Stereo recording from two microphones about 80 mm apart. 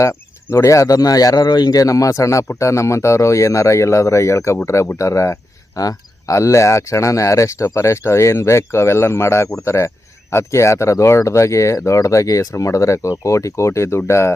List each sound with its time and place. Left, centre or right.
0.0 s speech: left